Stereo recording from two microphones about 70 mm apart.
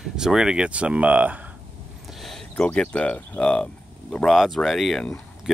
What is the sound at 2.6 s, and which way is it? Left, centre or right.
Speech, centre.